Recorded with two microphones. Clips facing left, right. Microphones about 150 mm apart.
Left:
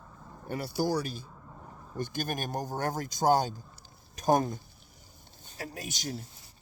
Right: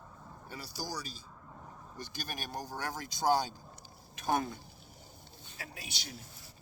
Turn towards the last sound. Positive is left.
turn(degrees=45)  # may be behind; listen again after turning